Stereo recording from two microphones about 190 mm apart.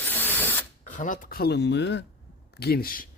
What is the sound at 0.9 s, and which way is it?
Speech, 40° left (ahead or behind).